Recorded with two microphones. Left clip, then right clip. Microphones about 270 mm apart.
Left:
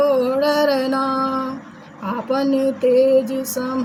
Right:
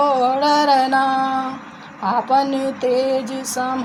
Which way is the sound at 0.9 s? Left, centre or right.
Right.